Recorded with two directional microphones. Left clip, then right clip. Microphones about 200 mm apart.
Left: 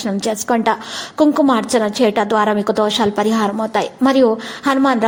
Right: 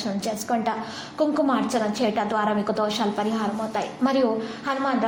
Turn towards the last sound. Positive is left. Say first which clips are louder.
# left 10 dB
turn(degrees=45)  # may be behind; listen again after turning